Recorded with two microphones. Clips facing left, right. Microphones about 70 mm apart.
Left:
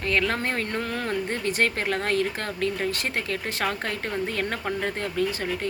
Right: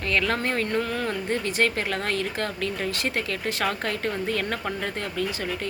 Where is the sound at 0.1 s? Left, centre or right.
Left.